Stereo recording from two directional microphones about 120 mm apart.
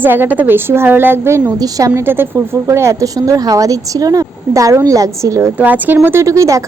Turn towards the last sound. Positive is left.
turn(degrees=-25)  # may be behind; listen again after turning